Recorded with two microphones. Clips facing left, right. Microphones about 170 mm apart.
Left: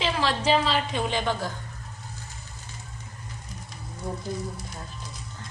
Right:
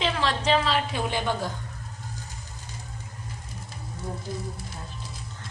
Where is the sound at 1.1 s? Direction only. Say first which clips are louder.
Right 1 dB; 15° right (ahead or behind).